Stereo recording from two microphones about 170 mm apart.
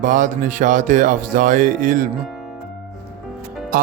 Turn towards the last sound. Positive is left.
turn(degrees=-60)  # may be behind; listen again after turning